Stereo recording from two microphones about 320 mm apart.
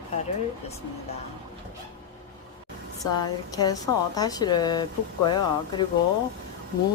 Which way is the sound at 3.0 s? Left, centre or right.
Centre.